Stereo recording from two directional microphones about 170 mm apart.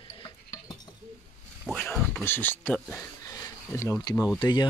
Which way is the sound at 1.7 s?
5° left (ahead or behind).